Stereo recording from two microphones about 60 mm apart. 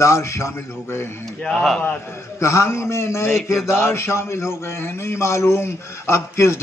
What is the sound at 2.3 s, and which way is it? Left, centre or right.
A man's voice, left.